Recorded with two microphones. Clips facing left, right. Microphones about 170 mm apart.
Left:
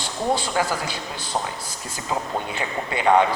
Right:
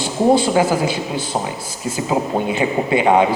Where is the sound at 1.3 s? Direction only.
20° right (ahead or behind).